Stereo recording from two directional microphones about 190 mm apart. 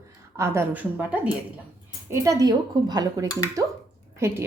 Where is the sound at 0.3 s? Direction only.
15° right (ahead or behind).